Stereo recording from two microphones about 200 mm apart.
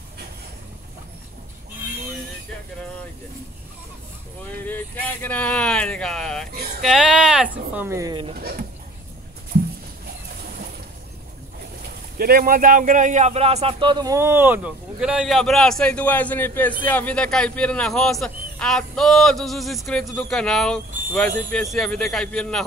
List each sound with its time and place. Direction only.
4.6 s a man's voice: 10° left (ahead or behind); by 8.3 s 20° right (ahead or behind)
8.4 s a sound: 50° right (ahead or behind)
12.2 s a man's voice: 45° right (ahead or behind); by 22.7 s 5° left (ahead or behind)